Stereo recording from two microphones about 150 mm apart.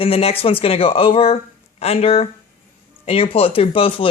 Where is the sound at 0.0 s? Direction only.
40° left (ahead or behind).